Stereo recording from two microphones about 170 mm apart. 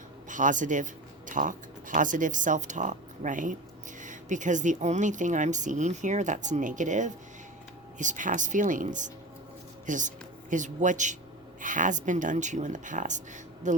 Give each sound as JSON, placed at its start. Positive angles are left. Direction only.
{"t": 0.3, "sound": "speech", "side_deg": -50}